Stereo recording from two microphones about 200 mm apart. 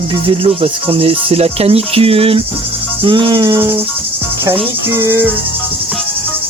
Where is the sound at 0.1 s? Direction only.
25° right (ahead or behind).